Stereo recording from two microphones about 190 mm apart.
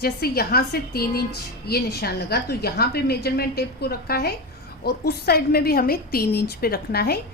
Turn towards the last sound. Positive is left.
turn(degrees=55)  # may be behind; listen again after turning